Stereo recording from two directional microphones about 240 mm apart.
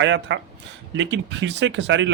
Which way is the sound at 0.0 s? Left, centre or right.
Right.